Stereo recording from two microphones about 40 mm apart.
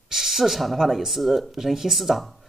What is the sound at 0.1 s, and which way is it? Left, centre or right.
Speech, centre.